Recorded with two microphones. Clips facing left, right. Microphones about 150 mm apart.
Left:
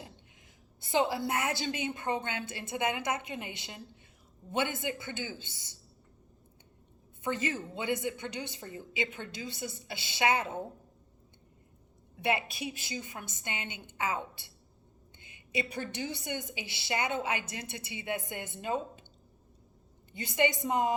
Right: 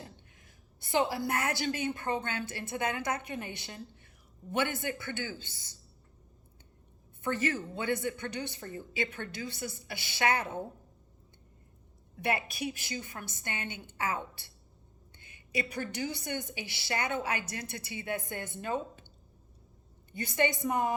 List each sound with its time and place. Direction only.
0.8 s a woman's voice: 20° left (ahead or behind)
7.2 s a woman's voice: 20° left (ahead or behind)
12.1 s a woman's voice: 20° left (ahead or behind)
20.1 s a woman's voice: 20° left (ahead or behind)